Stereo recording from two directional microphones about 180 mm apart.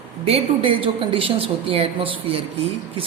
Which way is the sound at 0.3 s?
30° right (ahead or behind).